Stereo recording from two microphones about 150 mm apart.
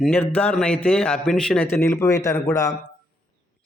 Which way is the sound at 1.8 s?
20° left (ahead or behind).